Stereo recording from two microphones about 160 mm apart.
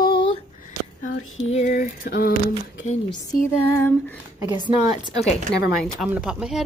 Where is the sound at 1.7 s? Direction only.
65° left (ahead or behind).